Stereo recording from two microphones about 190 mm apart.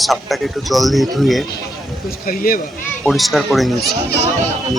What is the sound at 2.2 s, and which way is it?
Speech, 50° left (ahead or behind).